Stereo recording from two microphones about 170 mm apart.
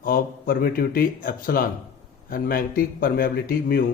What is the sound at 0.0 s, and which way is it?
Speech, 60° left (ahead or behind).